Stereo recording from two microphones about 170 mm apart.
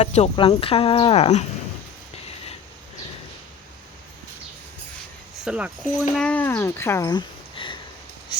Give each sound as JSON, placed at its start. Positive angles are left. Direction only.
{"t": 0.0, "sound": "speech", "side_deg": 35}
{"t": 5.5, "sound": "speech", "side_deg": -5}
{"t": 6.1, "sound": "speech", "side_deg": 10}